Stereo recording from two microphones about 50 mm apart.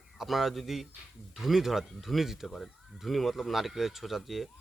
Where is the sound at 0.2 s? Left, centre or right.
Centre.